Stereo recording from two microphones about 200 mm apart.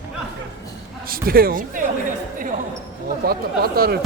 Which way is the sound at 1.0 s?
45° right (ahead or behind).